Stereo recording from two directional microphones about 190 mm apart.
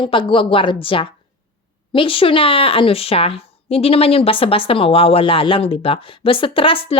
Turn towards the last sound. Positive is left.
turn(degrees=30)  # may be behind; listen again after turning